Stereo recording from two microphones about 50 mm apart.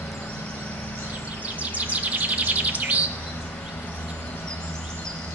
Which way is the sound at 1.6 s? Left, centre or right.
Right.